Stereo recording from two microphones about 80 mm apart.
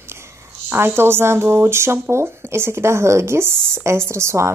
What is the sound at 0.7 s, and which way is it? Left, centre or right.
A woman's voice, right.